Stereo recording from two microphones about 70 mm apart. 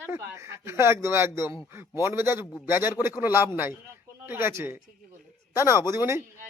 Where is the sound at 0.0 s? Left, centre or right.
Right.